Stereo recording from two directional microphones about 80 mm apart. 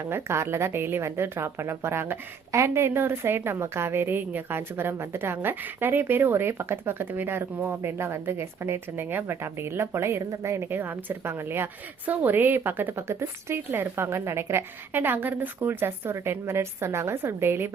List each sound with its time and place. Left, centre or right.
0.0 s a woman's voice: right